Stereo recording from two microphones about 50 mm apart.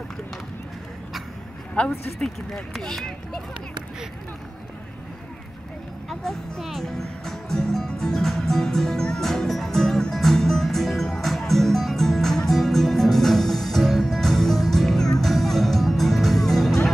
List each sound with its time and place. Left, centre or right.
1.8 s speech: left
2.1 s speech: centre
6.0 s a child's voice: centre
6.9 s music: centre